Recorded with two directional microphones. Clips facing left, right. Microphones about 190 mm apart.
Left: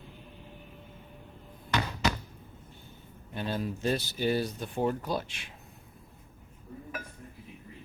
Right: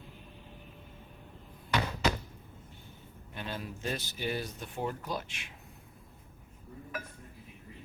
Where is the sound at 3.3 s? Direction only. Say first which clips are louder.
Left 7 dB; 35° left (ahead or behind).